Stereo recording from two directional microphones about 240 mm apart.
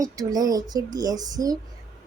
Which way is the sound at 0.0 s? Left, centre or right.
Centre.